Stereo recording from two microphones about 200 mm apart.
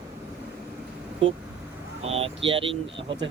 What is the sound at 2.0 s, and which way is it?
Speech, 30° right (ahead or behind).